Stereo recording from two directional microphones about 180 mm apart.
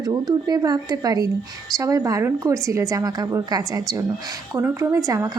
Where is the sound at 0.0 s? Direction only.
20° right (ahead or behind).